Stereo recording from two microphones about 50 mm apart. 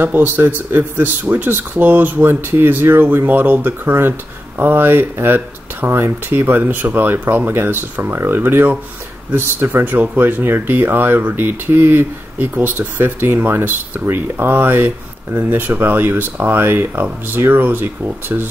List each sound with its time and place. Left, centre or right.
0.0 s speech: right
12.4 s speech: right